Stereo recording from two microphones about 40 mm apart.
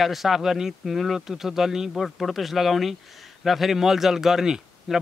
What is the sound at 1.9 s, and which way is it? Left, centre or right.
A man's voice, centre.